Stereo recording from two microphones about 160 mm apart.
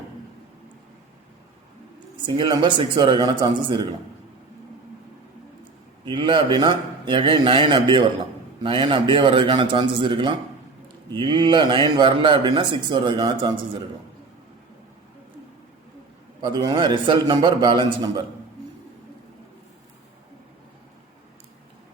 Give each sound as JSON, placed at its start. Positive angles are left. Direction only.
{"t": 2.2, "sound": "speech", "side_deg": -30}
{"t": 6.1, "sound": "a man's voice", "side_deg": -30}
{"t": 16.4, "sound": "speech", "side_deg": -25}